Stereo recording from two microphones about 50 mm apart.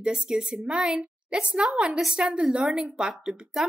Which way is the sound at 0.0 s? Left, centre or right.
Centre.